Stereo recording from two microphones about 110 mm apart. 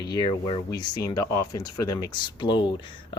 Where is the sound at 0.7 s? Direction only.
35° left (ahead or behind).